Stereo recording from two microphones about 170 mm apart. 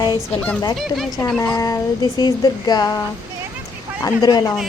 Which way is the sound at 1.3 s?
10° left (ahead or behind).